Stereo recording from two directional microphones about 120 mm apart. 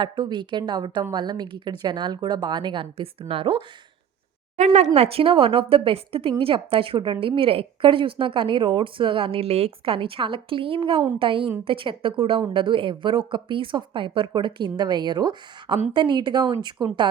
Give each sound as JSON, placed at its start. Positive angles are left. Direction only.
{"t": 0.0, "sound": "a woman's voice", "side_deg": -40}
{"t": 4.5, "sound": "speech", "side_deg": -80}
{"t": 4.9, "sound": "a woman's voice", "side_deg": -55}